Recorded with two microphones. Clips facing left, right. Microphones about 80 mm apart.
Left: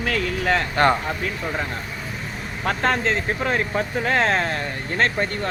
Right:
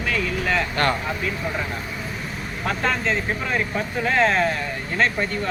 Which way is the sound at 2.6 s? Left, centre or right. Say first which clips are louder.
Left 2 dB; left.